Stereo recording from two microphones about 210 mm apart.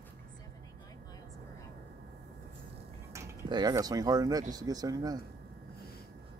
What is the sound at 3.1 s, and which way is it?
Speech, 20° right (ahead or behind).